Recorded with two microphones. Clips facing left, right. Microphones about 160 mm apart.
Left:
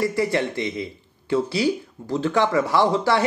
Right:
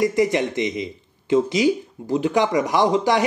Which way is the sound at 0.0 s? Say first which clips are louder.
Right 3 dB; 15° right (ahead or behind).